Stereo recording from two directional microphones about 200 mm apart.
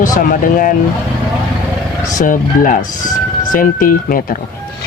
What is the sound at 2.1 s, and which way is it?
Speech, 40° left (ahead or behind).